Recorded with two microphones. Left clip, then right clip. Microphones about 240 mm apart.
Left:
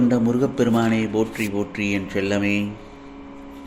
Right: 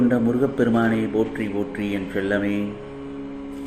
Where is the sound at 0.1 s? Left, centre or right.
Left.